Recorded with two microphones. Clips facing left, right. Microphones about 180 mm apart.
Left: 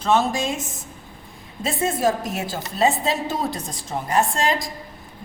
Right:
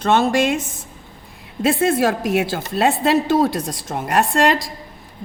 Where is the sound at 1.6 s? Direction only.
70° right (ahead or behind).